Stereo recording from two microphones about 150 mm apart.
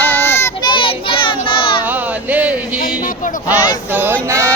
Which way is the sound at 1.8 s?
10° right (ahead or behind).